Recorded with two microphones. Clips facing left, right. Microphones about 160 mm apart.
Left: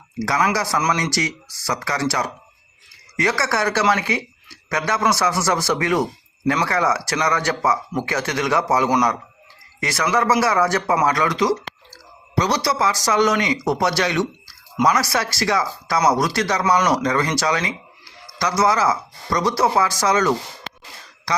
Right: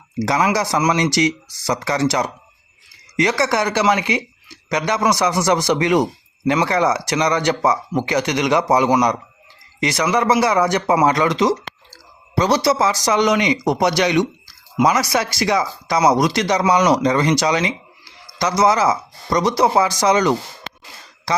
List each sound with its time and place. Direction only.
0.2 s speech: 20° right (ahead or behind)